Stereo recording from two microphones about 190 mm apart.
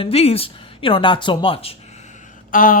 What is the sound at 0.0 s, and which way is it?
Speech, 30° left (ahead or behind).